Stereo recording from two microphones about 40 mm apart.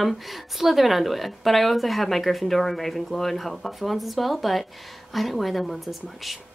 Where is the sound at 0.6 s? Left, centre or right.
Centre.